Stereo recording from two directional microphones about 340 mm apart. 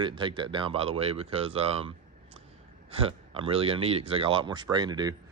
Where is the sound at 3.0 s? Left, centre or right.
Centre.